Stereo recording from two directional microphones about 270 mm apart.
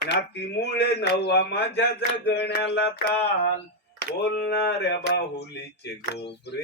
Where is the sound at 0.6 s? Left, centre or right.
Left.